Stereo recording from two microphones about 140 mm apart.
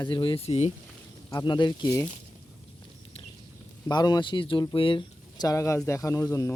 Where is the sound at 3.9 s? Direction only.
30° left (ahead or behind).